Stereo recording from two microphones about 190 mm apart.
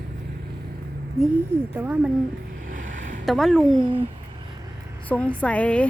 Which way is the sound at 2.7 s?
40° right (ahead or behind).